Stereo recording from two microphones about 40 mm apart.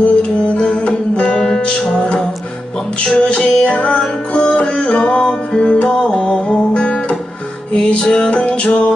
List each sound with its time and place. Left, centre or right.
0.0 s music: left
3.3 s music: left